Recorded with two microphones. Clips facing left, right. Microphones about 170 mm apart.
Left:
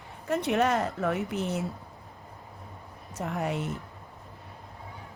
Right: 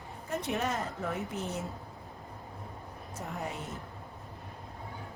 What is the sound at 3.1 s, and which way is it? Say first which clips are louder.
Speech: left 8 dB; 75° left (ahead or behind).